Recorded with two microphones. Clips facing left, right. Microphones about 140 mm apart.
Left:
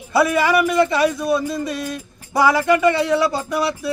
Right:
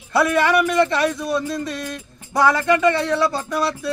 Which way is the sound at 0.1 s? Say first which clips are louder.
Left 1 dB; 5° left (ahead or behind).